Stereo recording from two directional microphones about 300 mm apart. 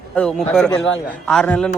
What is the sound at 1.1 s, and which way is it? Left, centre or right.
Speech, centre.